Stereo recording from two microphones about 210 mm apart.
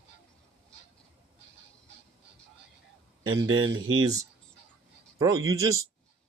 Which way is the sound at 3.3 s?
20° right (ahead or behind).